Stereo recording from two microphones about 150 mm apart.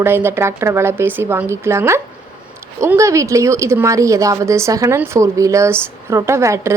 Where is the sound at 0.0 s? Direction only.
15° right (ahead or behind).